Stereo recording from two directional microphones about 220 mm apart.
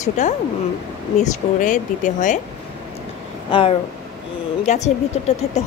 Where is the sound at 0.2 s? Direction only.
35° left (ahead or behind).